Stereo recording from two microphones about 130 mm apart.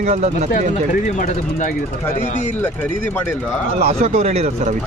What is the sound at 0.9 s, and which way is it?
Speech, 75° left (ahead or behind).